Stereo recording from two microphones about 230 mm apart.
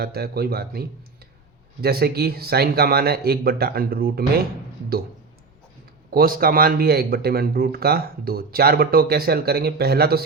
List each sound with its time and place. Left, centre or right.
0.0 s speech: right
6.1 s a man's voice: right